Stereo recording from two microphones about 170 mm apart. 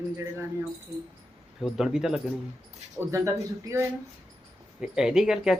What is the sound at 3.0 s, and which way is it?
Speech, 15° right (ahead or behind).